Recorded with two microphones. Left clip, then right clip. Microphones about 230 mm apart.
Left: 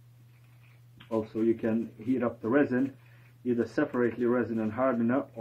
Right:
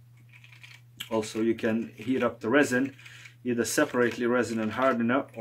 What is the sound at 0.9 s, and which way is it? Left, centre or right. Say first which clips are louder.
Speech: right 2 dB; centre.